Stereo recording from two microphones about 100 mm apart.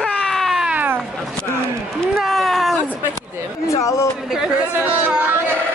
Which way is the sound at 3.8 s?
30° left (ahead or behind).